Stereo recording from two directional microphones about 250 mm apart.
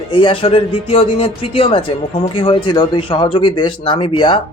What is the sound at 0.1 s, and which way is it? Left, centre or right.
Speech, left.